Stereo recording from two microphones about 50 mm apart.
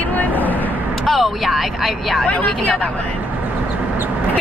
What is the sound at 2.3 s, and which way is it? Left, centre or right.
Speech, left.